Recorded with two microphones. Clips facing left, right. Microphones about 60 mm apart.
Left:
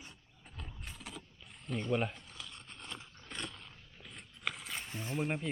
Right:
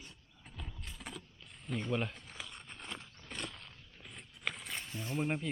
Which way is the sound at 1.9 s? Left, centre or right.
Centre.